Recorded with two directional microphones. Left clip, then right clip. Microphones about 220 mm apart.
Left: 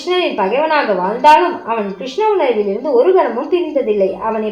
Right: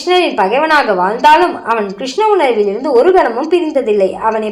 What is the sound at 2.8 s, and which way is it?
A woman's voice, 25° right (ahead or behind).